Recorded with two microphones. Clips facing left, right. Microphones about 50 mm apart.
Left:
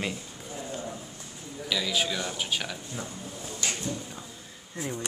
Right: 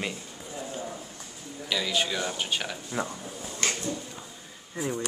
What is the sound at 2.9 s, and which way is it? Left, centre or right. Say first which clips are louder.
Speech: right 10 dB; right.